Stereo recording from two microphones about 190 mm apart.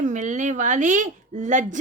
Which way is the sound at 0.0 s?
40° right (ahead or behind).